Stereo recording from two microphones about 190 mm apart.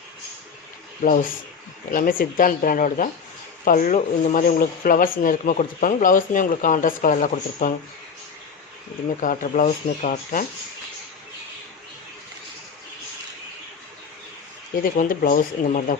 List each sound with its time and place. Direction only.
1.0 s speech: 45° left (ahead or behind)
9.2 s speech: 45° left (ahead or behind)
14.8 s speech: 45° left (ahead or behind)